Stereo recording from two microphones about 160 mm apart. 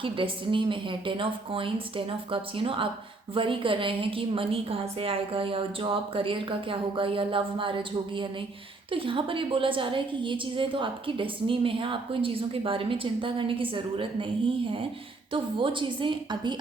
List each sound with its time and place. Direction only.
0.0 s a woman's voice: 30° right (ahead or behind)